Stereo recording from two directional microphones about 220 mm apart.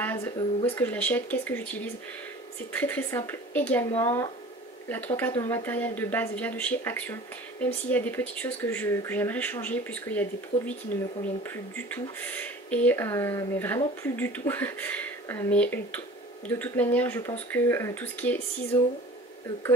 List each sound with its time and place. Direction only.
0.4 s speech: 20° left (ahead or behind)
0.7 s speech: 10° left (ahead or behind)
2.8 s speech: 10° left (ahead or behind)